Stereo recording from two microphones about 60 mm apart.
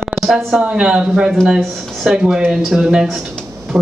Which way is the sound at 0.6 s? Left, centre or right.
Centre.